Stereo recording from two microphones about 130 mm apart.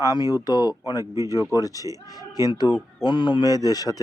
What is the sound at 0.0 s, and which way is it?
Speech, 30° left (ahead or behind).